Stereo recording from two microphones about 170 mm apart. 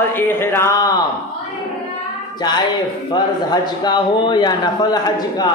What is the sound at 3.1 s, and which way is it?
A man's voice, 25° left (ahead or behind).